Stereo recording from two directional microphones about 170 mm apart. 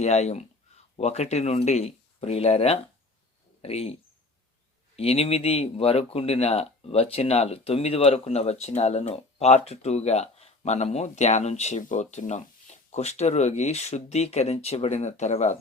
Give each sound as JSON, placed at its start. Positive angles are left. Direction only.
{"t": 0.0, "sound": "speech", "side_deg": 40}
{"t": 4.9, "sound": "speech", "side_deg": 35}